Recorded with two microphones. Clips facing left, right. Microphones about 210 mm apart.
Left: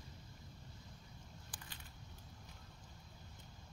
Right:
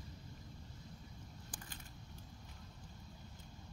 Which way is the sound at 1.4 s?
50° right (ahead or behind).